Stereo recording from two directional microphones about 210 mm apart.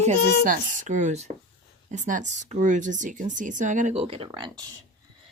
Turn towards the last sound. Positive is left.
turn(degrees=-20)  # may be behind; listen again after turning